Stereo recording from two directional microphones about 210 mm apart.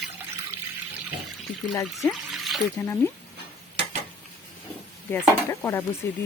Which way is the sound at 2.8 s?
15° left (ahead or behind).